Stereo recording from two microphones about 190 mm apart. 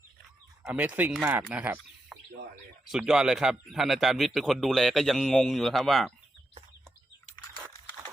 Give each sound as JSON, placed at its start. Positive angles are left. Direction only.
{"t": 0.6, "sound": "speech", "side_deg": -10}